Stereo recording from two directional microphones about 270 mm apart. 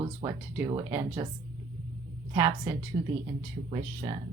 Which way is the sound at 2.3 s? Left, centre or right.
Centre.